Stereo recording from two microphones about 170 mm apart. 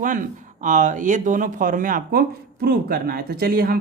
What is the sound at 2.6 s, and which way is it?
Speech, 65° right (ahead or behind).